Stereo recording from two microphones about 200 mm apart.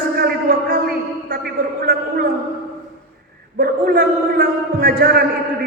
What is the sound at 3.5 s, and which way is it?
A man's voice, 50° right (ahead or behind).